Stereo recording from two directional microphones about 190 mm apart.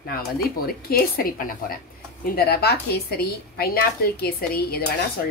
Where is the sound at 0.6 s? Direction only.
50° left (ahead or behind).